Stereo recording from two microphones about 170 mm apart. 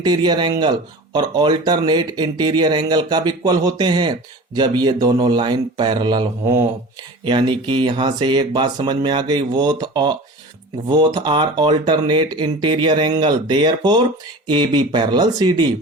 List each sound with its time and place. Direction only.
0.0 s speech: 25° right (ahead or behind)